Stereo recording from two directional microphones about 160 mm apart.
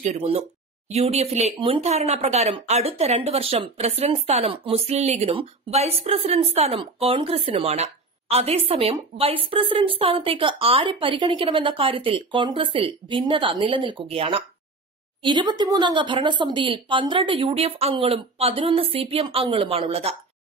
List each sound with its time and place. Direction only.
0.1 s speech: 40° right (ahead or behind)